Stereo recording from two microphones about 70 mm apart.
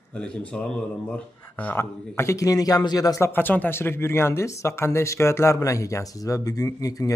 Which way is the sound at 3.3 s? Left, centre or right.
Left.